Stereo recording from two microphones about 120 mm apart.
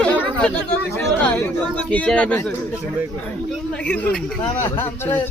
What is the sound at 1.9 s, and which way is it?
Speech, 10° left (ahead or behind).